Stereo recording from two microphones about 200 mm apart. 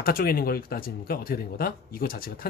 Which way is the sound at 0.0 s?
45° left (ahead or behind).